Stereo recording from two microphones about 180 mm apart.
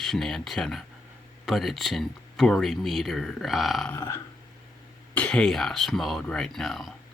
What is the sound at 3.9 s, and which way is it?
Burping, 15° left (ahead or behind).